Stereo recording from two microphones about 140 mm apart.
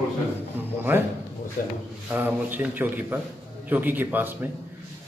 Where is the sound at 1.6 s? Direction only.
85° left.